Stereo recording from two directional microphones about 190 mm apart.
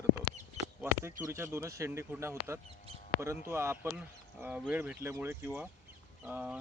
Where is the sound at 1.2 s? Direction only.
15° right (ahead or behind).